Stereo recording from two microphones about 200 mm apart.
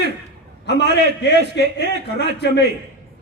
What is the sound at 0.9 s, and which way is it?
Speech, 55° left (ahead or behind).